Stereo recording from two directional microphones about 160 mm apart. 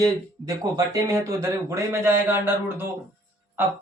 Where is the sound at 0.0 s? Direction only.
20° right (ahead or behind).